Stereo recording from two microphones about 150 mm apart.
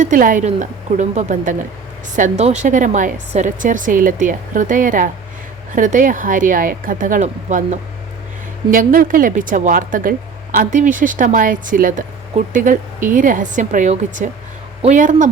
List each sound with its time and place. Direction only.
0.0 s speech: 65° right (ahead or behind)